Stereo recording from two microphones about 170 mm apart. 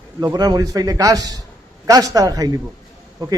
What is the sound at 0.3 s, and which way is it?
A man's voice, 25° right (ahead or behind).